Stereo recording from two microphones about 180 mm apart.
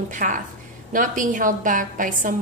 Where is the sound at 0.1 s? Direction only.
45° right (ahead or behind).